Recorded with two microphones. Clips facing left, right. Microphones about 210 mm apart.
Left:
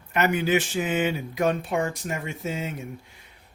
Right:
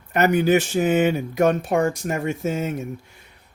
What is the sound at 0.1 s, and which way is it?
Speech, 40° right (ahead or behind).